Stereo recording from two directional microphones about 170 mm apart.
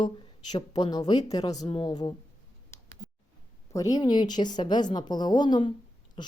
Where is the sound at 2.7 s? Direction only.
15° left (ahead or behind).